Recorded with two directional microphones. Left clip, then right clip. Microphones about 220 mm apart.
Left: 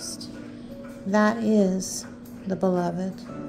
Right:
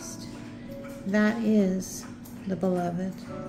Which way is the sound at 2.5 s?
15° left (ahead or behind).